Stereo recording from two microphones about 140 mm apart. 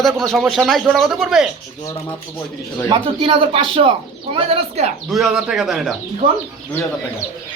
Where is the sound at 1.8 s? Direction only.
20° left (ahead or behind).